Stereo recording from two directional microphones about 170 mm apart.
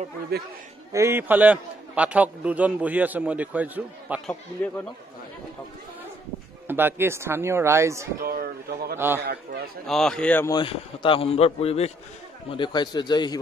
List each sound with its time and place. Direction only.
0.3 s a man's voice: 70° right (ahead or behind)
0.9 s a man's voice: 15° right (ahead or behind)
6.7 s a man's voice: 10° right (ahead or behind)
8.2 s speech: 60° right (ahead or behind)
8.9 s a man's voice: 15° right (ahead or behind)
9.2 s a man's voice: 70° right (ahead or behind)
9.8 s a man's voice: 5° left (ahead or behind)
10.5 s a man's voice: 30° left (ahead or behind)